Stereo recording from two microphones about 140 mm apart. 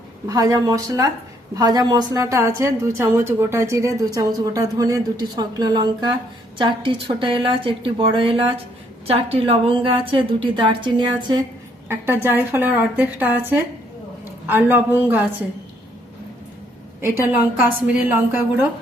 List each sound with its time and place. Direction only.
0.3 s a woman's voice: 25° right (ahead or behind)
11.9 s a woman's voice: 15° right (ahead or behind)
17.0 s speech: 15° right (ahead or behind)